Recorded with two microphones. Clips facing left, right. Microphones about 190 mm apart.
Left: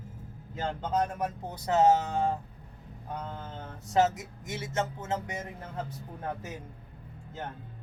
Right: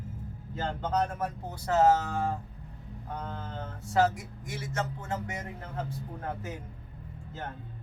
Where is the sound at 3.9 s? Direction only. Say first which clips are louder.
Left 1 dB; 20° left (ahead or behind).